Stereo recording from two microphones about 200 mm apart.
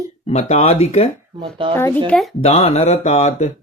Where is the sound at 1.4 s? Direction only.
25° right (ahead or behind).